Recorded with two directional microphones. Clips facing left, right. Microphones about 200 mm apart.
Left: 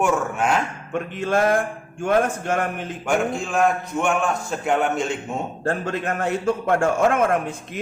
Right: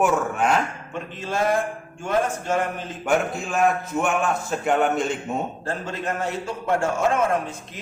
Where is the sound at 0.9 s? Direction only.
55° left (ahead or behind).